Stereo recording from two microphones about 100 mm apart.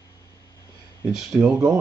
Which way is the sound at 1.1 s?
5° right (ahead or behind).